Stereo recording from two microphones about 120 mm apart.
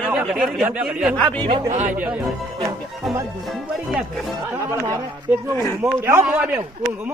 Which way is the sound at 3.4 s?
Centre (ahead or behind).